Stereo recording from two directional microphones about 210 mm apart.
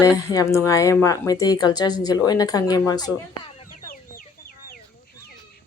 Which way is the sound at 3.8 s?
40° left (ahead or behind).